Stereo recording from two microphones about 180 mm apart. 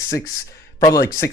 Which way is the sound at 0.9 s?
15° left (ahead or behind).